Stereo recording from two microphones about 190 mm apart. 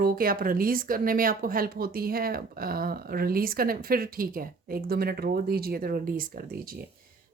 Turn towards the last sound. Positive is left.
turn(degrees=-50)  # may be behind; listen again after turning